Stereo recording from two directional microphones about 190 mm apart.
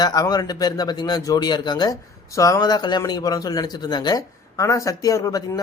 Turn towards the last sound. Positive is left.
turn(degrees=20)  # may be behind; listen again after turning